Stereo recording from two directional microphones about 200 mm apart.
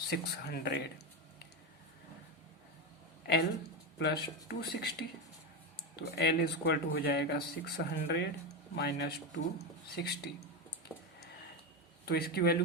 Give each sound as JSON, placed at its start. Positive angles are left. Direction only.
{"t": 0.1, "sound": "speech", "side_deg": 55}
{"t": 3.9, "sound": "speech", "side_deg": 55}
{"t": 10.9, "sound": "a sound", "side_deg": 10}
{"t": 12.0, "sound": "speech", "side_deg": 50}